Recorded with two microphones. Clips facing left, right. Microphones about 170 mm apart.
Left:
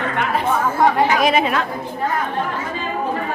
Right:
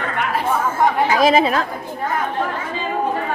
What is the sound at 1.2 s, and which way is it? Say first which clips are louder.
Speech: right 2 dB; 30° right (ahead or behind).